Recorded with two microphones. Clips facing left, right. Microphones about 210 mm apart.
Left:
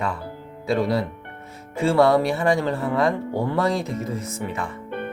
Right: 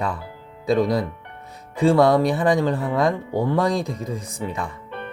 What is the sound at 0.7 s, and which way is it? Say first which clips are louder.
Speech: right 2 dB; 15° right (ahead or behind).